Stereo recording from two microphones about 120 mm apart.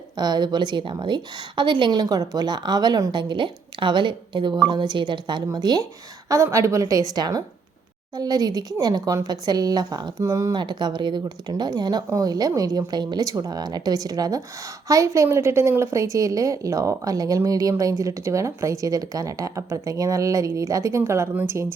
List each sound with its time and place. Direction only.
0.2 s a woman's voice: 35° right (ahead or behind)
10.5 s a woman's voice: 40° right (ahead or behind); by 21.7 s 20° right (ahead or behind)